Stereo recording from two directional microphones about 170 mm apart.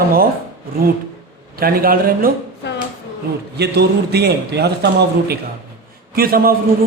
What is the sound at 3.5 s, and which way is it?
A man's voice, 75° right (ahead or behind).